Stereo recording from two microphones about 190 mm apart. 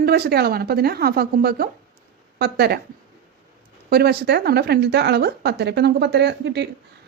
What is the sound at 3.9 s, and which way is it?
A woman's voice, 55° right (ahead or behind).